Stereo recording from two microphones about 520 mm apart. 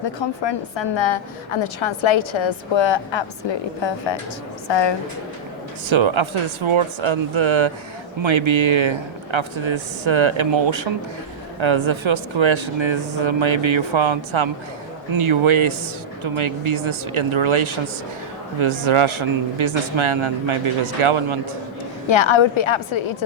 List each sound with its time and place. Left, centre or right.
0.0 s a woman's voice: left
5.9 s speech: right
22.0 s a woman's voice: left